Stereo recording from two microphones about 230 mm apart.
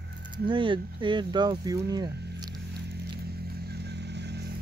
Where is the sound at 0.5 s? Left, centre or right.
Right.